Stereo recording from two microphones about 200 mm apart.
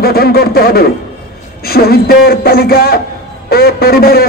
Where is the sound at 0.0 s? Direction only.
50° left (ahead or behind).